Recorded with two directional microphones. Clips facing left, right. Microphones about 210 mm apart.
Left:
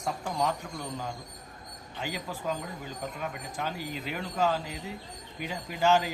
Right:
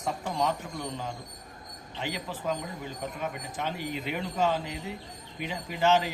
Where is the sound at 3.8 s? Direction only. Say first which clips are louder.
Right 3 dB; 40° left (ahead or behind).